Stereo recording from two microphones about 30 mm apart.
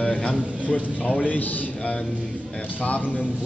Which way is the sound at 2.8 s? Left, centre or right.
Left.